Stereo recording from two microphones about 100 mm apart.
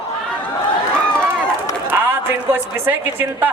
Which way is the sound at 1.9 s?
20° right (ahead or behind).